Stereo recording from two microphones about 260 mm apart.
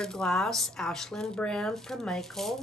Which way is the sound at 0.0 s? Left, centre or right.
Centre.